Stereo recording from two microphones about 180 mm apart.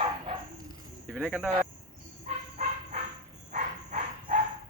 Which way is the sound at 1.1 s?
Centre (ahead or behind).